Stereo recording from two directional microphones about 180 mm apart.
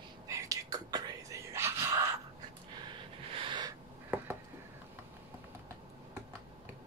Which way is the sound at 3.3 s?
25° right (ahead or behind).